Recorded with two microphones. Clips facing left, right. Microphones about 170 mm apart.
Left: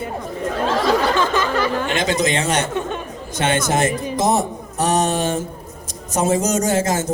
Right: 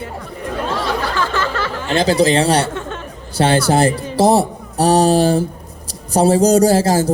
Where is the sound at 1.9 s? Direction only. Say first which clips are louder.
Right 6 dB; 35° right (ahead or behind).